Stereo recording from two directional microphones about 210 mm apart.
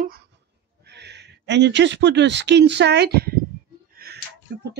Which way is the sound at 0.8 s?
55° right (ahead or behind).